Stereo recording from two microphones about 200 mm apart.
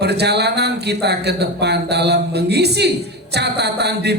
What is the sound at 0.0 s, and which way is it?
A man's voice, 55° right (ahead or behind).